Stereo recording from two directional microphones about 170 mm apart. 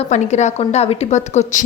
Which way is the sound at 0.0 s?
45° left (ahead or behind).